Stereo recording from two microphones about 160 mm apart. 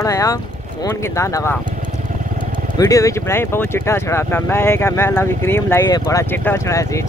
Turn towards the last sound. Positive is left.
turn(degrees=20)  # may be behind; listen again after turning